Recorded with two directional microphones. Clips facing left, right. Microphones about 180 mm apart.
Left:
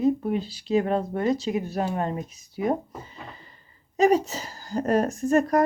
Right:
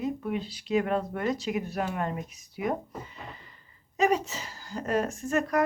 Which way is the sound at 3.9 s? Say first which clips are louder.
Left 5 dB; 35° left (ahead or behind).